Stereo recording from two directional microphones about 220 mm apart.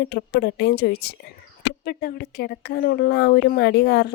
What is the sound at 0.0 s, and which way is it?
Speech, 50° left (ahead or behind).